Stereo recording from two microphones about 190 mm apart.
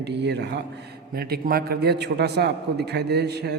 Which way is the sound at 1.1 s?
55° right (ahead or behind).